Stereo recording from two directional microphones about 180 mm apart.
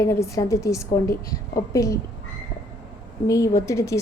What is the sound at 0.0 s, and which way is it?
A woman's voice, 15° left (ahead or behind).